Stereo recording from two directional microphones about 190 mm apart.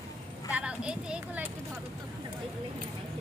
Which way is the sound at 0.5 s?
5° right (ahead or behind).